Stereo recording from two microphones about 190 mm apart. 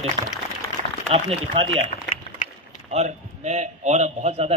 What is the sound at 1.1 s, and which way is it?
Speech, 30° right (ahead or behind).